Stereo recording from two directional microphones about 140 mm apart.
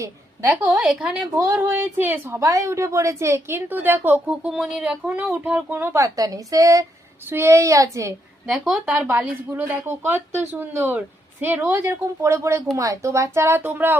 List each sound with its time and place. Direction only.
0.0 s a woman's voice: 20° right (ahead or behind)
0.8 s a woman's voice: 10° right (ahead or behind)
8.4 s a woman's voice: centre (ahead or behind)